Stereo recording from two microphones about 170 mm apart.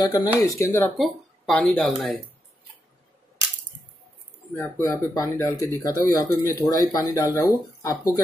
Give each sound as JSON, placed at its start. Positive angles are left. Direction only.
{"t": 0.0, "sound": "speech", "side_deg": 20}
{"t": 0.9, "sound": "speech", "side_deg": 0}
{"t": 4.6, "sound": "speech", "side_deg": 15}